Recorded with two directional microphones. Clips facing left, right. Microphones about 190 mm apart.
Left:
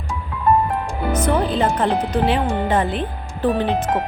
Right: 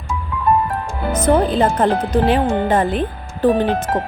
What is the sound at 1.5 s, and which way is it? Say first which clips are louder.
Speech: right 3 dB; 45° right (ahead or behind).